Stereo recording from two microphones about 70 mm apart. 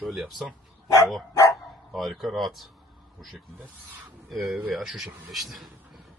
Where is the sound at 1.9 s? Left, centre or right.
Centre.